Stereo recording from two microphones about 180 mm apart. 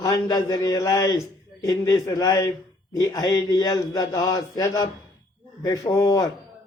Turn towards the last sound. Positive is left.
turn(degrees=20)  # may be behind; listen again after turning